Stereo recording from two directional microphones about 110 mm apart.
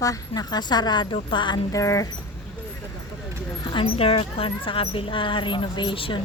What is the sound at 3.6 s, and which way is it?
Speech, 45° left (ahead or behind).